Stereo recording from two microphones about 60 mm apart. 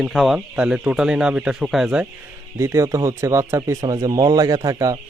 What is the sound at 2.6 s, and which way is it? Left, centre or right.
Speech, right.